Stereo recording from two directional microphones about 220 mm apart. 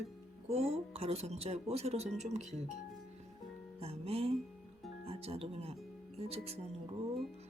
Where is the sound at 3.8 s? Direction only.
25° right (ahead or behind).